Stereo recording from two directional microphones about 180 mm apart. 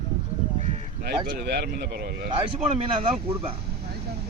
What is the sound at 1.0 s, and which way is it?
A man's voice, 60° right (ahead or behind).